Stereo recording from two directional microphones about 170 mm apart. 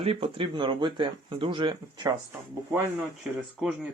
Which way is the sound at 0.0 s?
30° right (ahead or behind).